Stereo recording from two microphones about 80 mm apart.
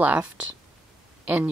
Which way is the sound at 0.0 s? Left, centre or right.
Centre.